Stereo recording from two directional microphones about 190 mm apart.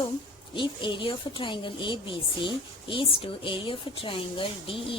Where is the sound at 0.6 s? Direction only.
25° left (ahead or behind).